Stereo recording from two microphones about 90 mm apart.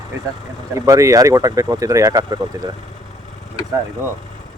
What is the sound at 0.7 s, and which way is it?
Speech, 35° right (ahead or behind).